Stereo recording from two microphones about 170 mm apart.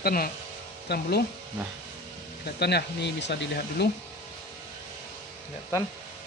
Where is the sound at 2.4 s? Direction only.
75° left (ahead or behind).